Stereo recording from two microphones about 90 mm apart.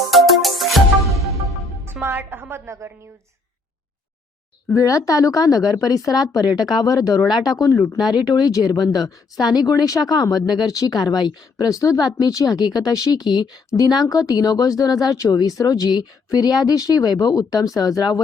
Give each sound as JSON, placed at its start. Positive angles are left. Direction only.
{"t": 0.1, "sound": "music", "side_deg": 0}
{"t": 1.9, "sound": "a woman's voice", "side_deg": -25}
{"t": 4.7, "sound": "a woman's voice", "side_deg": 35}
{"t": 7.9, "sound": "speech", "side_deg": -5}
{"t": 8.5, "sound": "speech", "side_deg": 45}
{"t": 13.7, "sound": "speech", "side_deg": 40}